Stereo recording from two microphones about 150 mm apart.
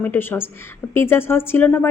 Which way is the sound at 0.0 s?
15° left (ahead or behind).